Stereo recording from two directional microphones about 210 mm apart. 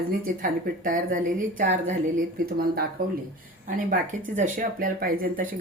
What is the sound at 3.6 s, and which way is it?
Speech, 35° right (ahead or behind).